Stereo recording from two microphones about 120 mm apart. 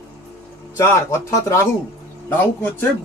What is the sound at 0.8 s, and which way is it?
Speech, 20° left (ahead or behind).